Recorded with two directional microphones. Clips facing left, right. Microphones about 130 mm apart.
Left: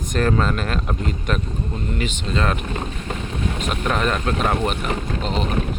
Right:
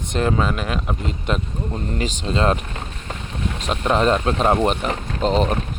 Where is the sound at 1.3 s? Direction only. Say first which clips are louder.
Right 4 dB; 25° right (ahead or behind).